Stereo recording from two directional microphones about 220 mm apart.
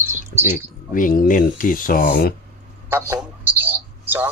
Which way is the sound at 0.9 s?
40° left (ahead or behind).